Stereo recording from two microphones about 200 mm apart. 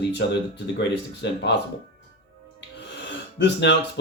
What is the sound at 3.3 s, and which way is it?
Speech, 60° left (ahead or behind).